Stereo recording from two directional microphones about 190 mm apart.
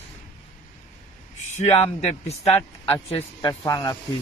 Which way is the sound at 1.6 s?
35° left (ahead or behind).